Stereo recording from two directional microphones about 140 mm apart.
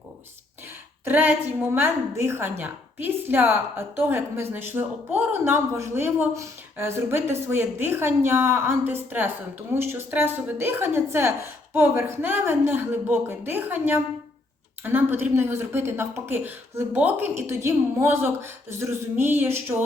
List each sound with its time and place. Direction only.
1.0 s a woman's voice: 10° right (ahead or behind)